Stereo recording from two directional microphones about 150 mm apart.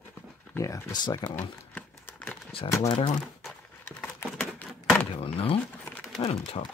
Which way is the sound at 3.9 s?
10° left (ahead or behind).